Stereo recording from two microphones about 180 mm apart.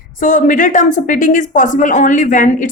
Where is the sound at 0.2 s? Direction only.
45° left (ahead or behind).